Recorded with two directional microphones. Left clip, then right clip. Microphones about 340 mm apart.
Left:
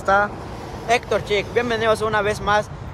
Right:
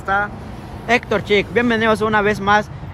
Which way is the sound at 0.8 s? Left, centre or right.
Right.